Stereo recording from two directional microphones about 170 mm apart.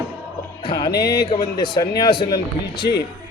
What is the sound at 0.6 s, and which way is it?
Music, 25° left (ahead or behind).